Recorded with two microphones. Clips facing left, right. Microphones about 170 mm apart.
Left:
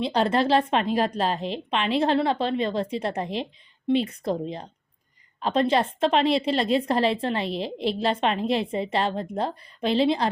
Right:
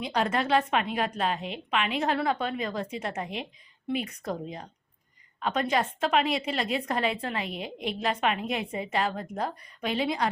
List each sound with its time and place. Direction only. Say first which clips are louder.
0.0 s a woman's voice: left 5 dB; 30° left (ahead or behind)